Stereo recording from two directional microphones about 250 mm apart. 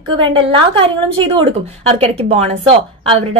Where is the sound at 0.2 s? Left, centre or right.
Centre.